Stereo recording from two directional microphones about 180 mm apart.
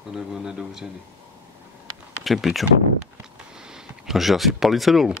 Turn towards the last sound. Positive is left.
turn(degrees=0)  # may be behind; listen again after turning